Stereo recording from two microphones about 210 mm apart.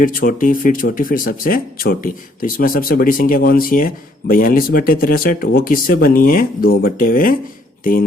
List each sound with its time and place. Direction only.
0.0 s speech: 40° left (ahead or behind)